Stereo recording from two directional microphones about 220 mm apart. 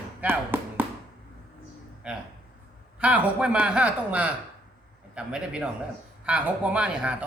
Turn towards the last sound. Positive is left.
turn(degrees=-5)  # may be behind; listen again after turning